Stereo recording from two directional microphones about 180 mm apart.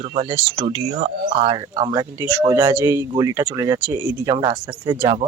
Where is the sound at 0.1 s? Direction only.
30° right (ahead or behind).